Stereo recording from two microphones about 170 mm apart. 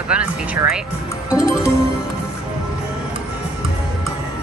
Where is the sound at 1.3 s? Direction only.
5° right (ahead or behind).